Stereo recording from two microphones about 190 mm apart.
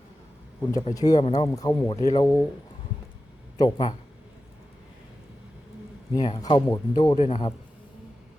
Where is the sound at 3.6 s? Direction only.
25° left (ahead or behind).